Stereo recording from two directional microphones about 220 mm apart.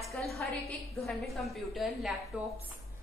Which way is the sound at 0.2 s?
Centre (ahead or behind).